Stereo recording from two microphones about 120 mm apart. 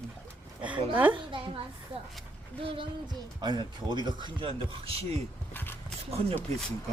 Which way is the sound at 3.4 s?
40° right (ahead or behind).